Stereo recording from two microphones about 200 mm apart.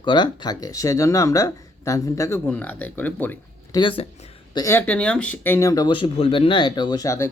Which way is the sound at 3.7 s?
25° left (ahead or behind).